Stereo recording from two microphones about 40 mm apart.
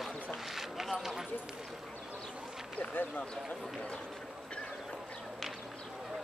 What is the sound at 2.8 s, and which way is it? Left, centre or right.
Speech, left.